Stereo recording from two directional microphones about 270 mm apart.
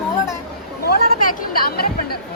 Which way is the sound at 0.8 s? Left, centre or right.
Left.